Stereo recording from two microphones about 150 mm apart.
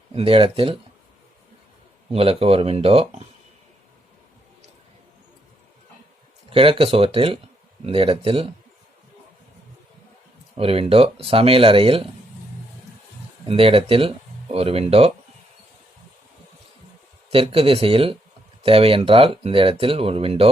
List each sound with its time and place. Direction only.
0.1 s speech: 40° right (ahead or behind)
2.1 s speech: 40° right (ahead or behind)
6.5 s speech: 40° right (ahead or behind)
10.5 s speech: 40° right (ahead or behind)
13.4 s speech: 40° right (ahead or behind)
17.3 s speech: 40° right (ahead or behind)